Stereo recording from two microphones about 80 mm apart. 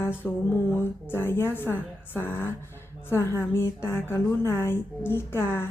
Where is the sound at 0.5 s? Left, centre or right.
Left.